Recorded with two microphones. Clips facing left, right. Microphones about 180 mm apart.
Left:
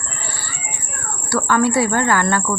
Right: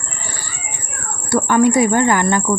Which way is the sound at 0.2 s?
15° right (ahead or behind).